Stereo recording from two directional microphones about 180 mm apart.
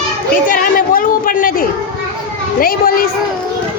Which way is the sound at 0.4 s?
50° left (ahead or behind).